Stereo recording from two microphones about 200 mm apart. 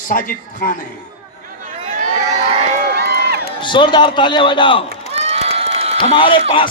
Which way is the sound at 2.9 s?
55° right (ahead or behind).